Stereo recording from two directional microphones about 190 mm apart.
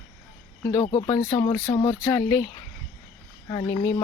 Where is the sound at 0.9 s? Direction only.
25° left (ahead or behind).